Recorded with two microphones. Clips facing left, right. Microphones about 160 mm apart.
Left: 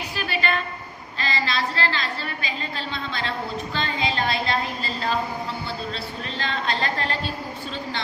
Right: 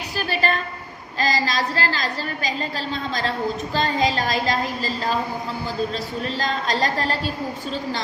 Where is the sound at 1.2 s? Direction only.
40° right (ahead or behind).